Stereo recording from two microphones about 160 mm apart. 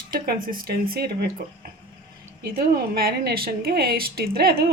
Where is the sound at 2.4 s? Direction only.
70° right (ahead or behind).